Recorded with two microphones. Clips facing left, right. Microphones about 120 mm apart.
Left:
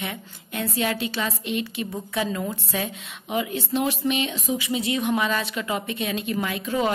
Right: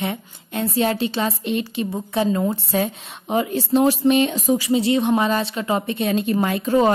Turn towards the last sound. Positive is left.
turn(degrees=-40)  # may be behind; listen again after turning